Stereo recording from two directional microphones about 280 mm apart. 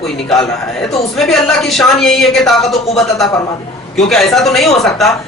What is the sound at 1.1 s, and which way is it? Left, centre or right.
Speech, centre.